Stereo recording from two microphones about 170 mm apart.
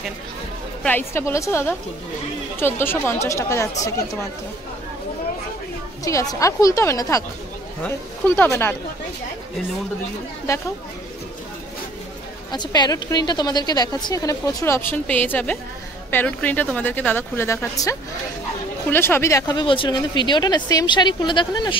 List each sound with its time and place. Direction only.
0.8 s a woman's voice: 15° left (ahead or behind)
6.0 s a woman's voice: 20° left (ahead or behind)
8.4 s a woman's voice: 15° left (ahead or behind)
10.5 s a woman's voice: 20° left (ahead or behind)
12.4 s a woman's voice: 25° left (ahead or behind)